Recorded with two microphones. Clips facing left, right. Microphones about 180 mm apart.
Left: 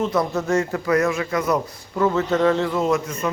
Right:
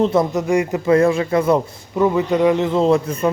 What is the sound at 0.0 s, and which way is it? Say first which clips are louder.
Speech: right 5 dB; 25° right (ahead or behind).